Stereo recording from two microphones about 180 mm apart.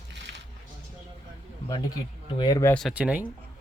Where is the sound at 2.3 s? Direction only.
20° left (ahead or behind).